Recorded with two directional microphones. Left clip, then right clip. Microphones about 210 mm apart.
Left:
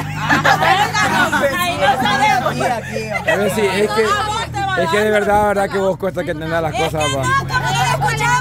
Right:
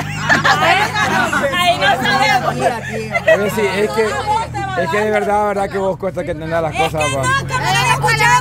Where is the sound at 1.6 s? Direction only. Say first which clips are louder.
Right 2 dB; 15° right (ahead or behind).